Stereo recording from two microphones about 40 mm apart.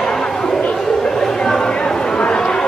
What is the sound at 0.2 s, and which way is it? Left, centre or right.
Chatter, left.